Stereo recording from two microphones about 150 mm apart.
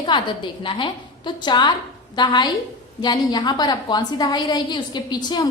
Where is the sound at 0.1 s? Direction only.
30° left (ahead or behind).